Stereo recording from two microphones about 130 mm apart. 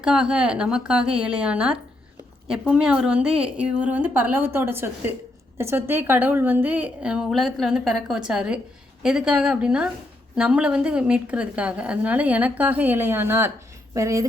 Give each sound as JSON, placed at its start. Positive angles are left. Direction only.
{"t": 0.0, "sound": "a woman's voice", "side_deg": -5}